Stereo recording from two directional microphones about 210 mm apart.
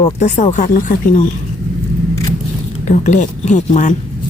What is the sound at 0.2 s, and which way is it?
Speech, 30° left (ahead or behind).